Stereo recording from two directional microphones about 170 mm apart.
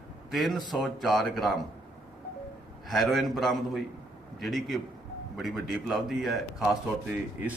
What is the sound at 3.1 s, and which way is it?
A man's voice, centre (ahead or behind).